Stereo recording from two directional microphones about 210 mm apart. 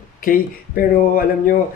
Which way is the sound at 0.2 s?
40° left (ahead or behind).